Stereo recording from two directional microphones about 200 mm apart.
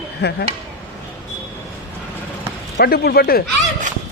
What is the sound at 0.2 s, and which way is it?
Speech, 55° left (ahead or behind).